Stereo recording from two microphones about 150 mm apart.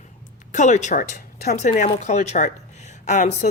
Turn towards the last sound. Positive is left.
turn(degrees=55)  # may be behind; listen again after turning